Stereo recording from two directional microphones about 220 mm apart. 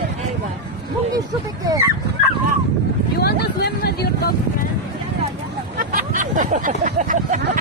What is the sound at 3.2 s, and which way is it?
Vehicle, 45° left (ahead or behind).